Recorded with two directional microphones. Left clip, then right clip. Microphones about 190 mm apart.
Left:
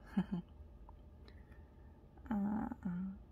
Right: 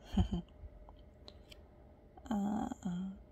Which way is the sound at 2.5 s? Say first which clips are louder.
Right 3 dB; 10° right (ahead or behind).